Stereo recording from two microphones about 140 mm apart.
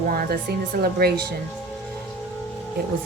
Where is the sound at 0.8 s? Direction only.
90° right.